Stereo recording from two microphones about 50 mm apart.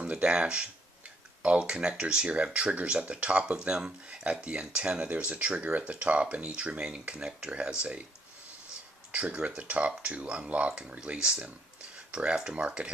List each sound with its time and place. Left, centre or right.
0.0 s speech: right
9.1 s speech: right